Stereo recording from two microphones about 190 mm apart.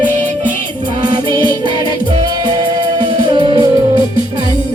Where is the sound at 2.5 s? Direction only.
25° right (ahead or behind).